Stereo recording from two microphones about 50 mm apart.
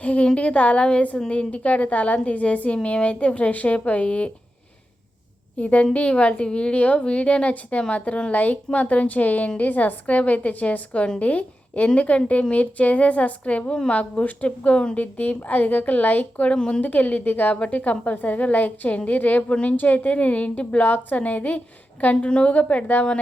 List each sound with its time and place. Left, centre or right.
0.0 s a woman's voice: left
5.5 s a woman's voice: left
16.6 s a woman's voice: centre
16.8 s a woman's voice: left
19.7 s a woman's voice: left